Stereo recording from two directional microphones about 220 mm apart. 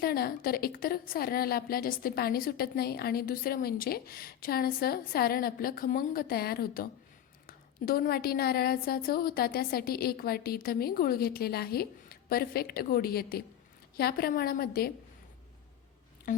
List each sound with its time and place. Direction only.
0.0 s a woman's voice: 45° left (ahead or behind)